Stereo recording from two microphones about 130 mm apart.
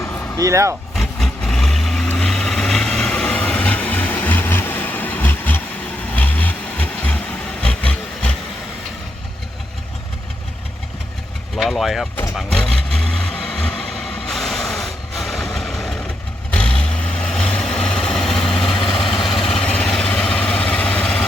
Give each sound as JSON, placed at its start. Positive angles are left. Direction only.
{"t": 0.3, "sound": "speech", "side_deg": -25}
{"t": 0.9, "sound": "vehicle", "side_deg": 5}
{"t": 7.6, "sound": "a sound", "side_deg": 10}
{"t": 11.5, "sound": "speech", "side_deg": 0}
{"t": 12.4, "sound": "vehicle", "side_deg": 5}